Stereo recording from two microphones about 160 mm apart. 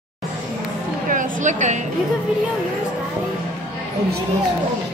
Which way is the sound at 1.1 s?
55° right (ahead or behind).